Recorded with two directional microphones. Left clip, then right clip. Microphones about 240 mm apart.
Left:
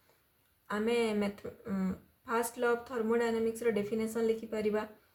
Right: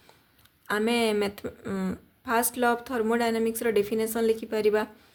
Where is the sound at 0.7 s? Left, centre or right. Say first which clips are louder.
Right 6 dB; right.